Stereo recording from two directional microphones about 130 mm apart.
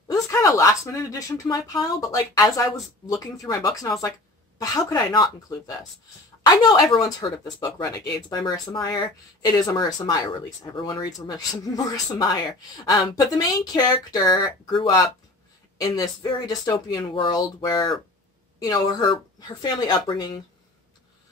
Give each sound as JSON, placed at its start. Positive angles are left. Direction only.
{"t": 0.1, "sound": "speech", "side_deg": 25}